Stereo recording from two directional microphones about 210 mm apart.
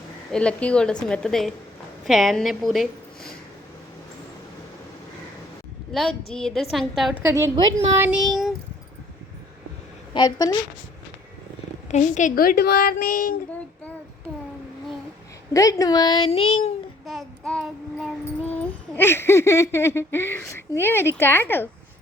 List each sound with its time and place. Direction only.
0.3 s a woman's voice: 5° left (ahead or behind)
5.9 s a woman's voice: centre (ahead or behind)
10.2 s a woman's voice: 20° left (ahead or behind)
11.9 s a woman's voice: 35° left (ahead or behind)
15.5 s a woman's voice: 15° left (ahead or behind)
17.1 s child singing: centre (ahead or behind)
18.5 s speech: 10° left (ahead or behind)